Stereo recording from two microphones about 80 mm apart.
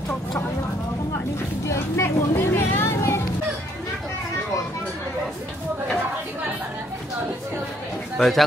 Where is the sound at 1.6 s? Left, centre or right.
Left.